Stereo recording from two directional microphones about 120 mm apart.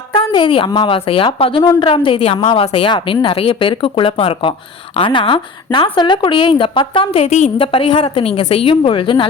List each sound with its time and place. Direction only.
0.1 s a woman's voice: 45° left (ahead or behind); by 7.5 s 70° left (ahead or behind)
7.6 s a woman's voice: 45° left (ahead or behind)